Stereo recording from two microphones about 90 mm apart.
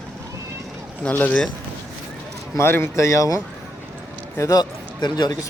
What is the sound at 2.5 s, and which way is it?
Speech, 25° left (ahead or behind).